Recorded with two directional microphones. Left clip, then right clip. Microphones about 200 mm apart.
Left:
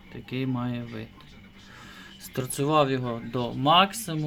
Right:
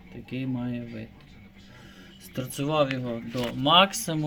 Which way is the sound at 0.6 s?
Centre (ahead or behind).